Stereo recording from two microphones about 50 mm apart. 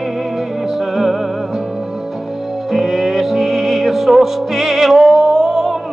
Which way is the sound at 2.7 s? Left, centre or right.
Centre.